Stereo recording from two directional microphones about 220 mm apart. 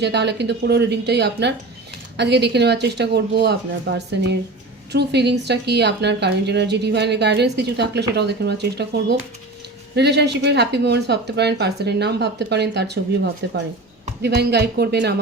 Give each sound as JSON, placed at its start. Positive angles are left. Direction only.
{"t": 0.0, "sound": "a woman's voice", "side_deg": -50}